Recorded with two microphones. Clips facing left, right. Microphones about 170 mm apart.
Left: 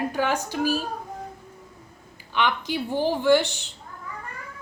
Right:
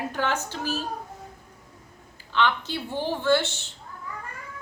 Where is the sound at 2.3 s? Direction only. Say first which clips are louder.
Even; 15° left (ahead or behind).